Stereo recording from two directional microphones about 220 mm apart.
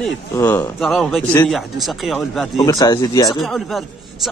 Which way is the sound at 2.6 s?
15° left (ahead or behind).